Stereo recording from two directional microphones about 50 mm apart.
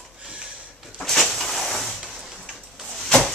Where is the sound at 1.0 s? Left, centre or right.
Centre.